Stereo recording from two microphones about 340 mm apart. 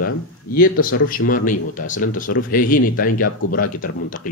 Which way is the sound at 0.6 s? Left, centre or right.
Left.